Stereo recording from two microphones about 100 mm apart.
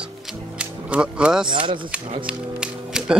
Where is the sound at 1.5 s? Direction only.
55° right (ahead or behind).